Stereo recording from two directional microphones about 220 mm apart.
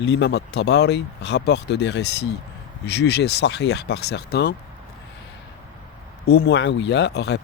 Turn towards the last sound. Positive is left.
turn(degrees=50)  # may be behind; listen again after turning